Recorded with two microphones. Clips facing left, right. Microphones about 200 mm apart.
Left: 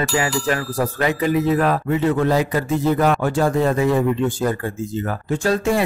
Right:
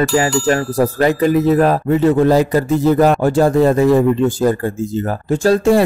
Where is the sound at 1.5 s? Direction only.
40° right (ahead or behind).